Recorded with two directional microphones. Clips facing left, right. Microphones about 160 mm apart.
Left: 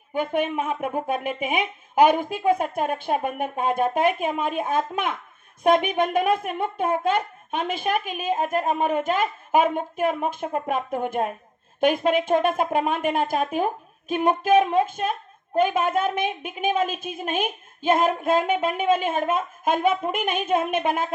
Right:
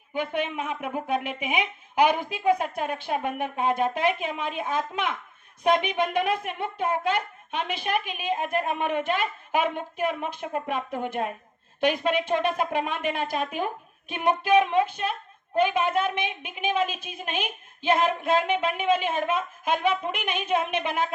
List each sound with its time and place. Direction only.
0.1 s speech: 50° left (ahead or behind)